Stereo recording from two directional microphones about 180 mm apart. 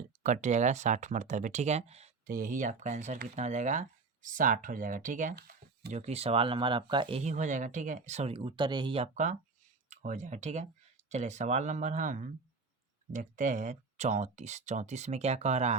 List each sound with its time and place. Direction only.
0.2 s speech: 40° right (ahead or behind)
2.2 s speech: 50° right (ahead or behind)
5.9 s speech: 35° right (ahead or behind)
7.2 s speech: 40° right (ahead or behind)